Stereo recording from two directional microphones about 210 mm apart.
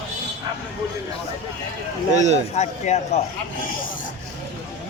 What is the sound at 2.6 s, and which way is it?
Speech, 30° left (ahead or behind).